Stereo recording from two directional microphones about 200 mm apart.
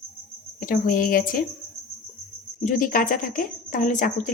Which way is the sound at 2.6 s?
40° left (ahead or behind).